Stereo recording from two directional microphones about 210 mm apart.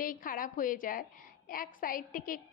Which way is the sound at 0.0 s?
40° left (ahead or behind).